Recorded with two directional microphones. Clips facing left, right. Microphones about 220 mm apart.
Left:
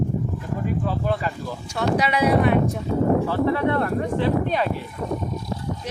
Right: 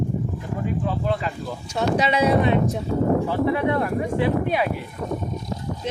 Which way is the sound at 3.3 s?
15° right (ahead or behind).